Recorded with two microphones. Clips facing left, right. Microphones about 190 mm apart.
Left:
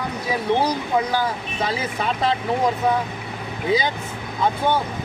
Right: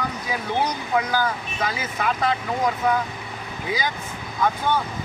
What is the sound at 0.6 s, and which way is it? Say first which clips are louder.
Speech: left 2 dB; 30° left (ahead or behind).